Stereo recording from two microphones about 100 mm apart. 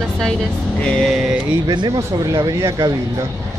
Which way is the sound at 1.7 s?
40° right (ahead or behind).